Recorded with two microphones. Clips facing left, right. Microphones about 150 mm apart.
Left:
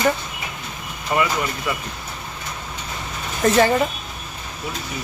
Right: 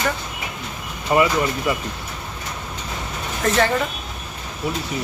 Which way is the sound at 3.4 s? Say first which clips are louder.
Left 3 dB; 10° left (ahead or behind).